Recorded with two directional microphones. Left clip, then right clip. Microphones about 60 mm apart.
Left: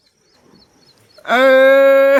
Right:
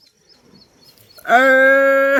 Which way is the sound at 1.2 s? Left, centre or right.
Left.